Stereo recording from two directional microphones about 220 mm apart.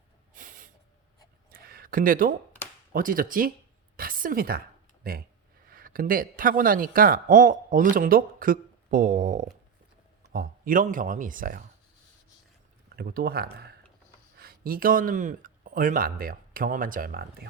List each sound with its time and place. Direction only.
0.3 s snort: 35° right (ahead or behind)
1.5 s a sound: 40° right (ahead or behind)
2.9 s a woman's voice: 40° right (ahead or behind)
13.0 s speech: 45° right (ahead or behind)